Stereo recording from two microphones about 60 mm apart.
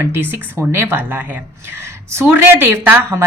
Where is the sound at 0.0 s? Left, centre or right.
Right.